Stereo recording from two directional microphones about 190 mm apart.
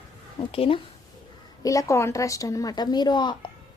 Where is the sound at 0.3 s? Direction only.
30° left (ahead or behind).